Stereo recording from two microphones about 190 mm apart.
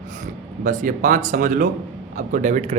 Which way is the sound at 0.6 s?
40° right (ahead or behind).